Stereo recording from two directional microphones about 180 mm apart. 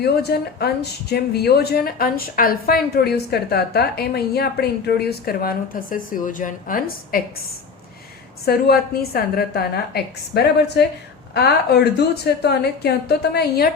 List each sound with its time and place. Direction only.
0.0 s a woman's voice: 65° left (ahead or behind)
8.4 s a woman's voice: 60° left (ahead or behind)